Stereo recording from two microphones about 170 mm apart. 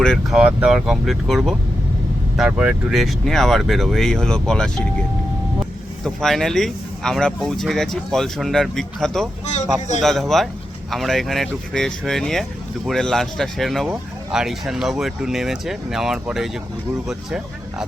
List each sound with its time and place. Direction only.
0.0 s speech: centre (ahead or behind)
6.1 s speech: centre (ahead or behind)
9.5 s speech: 45° left (ahead or behind)
10.0 s speech: centre (ahead or behind)